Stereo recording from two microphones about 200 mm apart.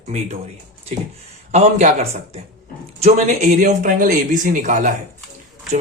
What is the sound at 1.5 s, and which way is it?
Speech, 35° right (ahead or behind).